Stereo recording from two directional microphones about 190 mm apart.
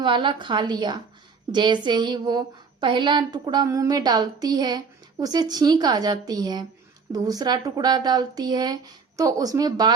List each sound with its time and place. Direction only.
0.0 s a woman's voice: 25° right (ahead or behind)